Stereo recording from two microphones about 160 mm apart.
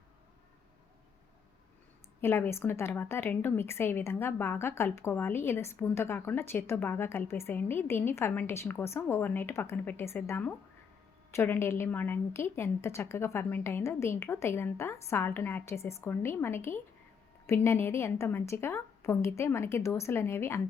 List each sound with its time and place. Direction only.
2.2 s a woman's voice: 15° left (ahead or behind)